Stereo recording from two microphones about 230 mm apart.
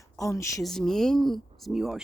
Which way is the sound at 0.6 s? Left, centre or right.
Centre.